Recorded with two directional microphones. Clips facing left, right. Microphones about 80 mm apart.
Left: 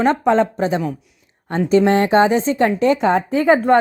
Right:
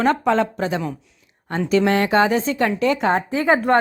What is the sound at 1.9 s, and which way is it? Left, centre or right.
Speech, left.